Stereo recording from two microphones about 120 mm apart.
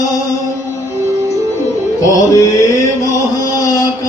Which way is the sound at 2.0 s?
25° left (ahead or behind).